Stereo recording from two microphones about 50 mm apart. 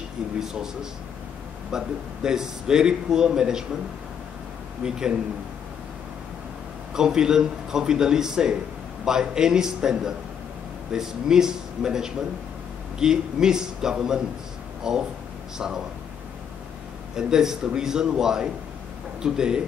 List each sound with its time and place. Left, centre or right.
0.4 s a man's voice: centre
1.7 s a man's voice: centre
4.8 s a man's voice: centre
6.9 s a man's voice: centre
17.1 s a man's voice: centre